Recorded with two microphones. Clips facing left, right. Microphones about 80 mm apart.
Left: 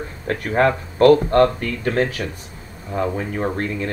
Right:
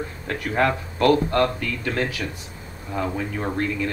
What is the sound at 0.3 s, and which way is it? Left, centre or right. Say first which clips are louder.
Speech: left 4 dB; left.